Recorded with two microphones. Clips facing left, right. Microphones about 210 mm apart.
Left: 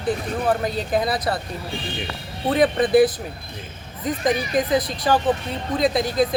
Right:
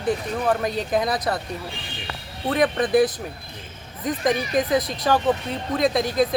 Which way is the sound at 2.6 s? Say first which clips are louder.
Left 3 dB; 25° left (ahead or behind).